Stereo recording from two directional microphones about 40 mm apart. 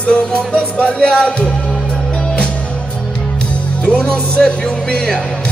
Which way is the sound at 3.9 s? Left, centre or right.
Left.